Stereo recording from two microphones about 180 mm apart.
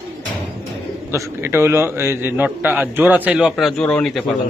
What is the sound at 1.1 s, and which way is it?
A man's voice, 15° right (ahead or behind).